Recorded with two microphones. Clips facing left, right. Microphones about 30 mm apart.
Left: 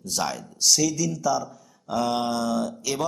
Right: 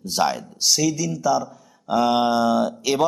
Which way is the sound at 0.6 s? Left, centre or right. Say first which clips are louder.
Right 1 dB; centre.